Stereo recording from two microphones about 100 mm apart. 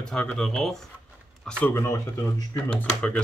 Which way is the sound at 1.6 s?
25° left (ahead or behind).